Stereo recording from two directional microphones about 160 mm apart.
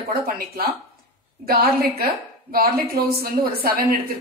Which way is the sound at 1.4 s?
70° right (ahead or behind).